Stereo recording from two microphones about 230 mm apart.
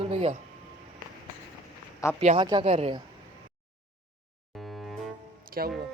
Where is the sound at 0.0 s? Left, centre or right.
Right.